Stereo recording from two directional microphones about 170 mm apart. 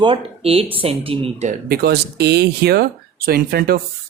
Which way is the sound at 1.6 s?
65° right (ahead or behind).